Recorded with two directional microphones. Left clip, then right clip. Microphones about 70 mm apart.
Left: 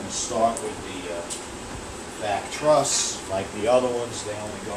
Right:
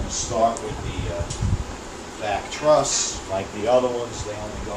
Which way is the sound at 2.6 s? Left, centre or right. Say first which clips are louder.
Right 2 dB; right.